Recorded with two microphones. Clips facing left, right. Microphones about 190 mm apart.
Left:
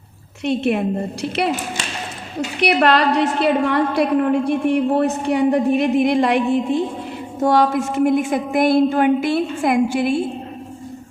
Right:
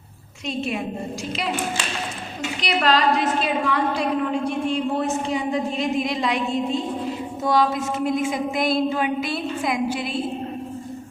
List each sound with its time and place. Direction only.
0.4 s a woman's voice: 65° left (ahead or behind)
2.8 s a woman's voice: 65° left (ahead or behind)